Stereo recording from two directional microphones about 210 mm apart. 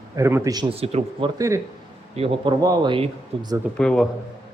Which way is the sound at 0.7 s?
30° right (ahead or behind).